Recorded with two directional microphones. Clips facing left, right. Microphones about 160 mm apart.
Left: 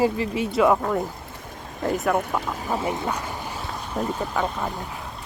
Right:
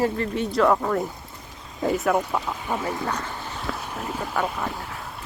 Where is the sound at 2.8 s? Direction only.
15° left (ahead or behind).